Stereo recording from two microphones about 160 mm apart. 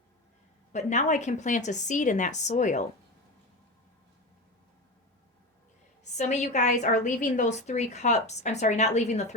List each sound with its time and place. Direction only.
0.7 s a woman's voice: 45° left (ahead or behind)
6.1 s a woman's voice: 45° left (ahead or behind)